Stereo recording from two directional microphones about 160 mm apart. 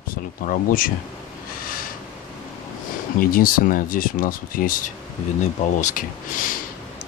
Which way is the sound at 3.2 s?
65° left (ahead or behind).